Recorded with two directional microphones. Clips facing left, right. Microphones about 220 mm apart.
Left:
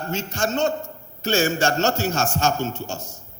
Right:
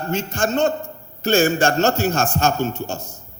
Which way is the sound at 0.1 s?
55° right (ahead or behind).